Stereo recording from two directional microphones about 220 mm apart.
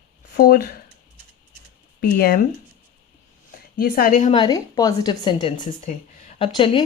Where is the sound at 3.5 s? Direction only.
40° left (ahead or behind).